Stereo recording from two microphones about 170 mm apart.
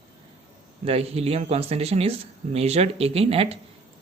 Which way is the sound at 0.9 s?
35° right (ahead or behind).